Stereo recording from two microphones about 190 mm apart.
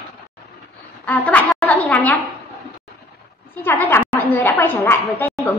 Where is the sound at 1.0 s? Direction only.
10° left (ahead or behind).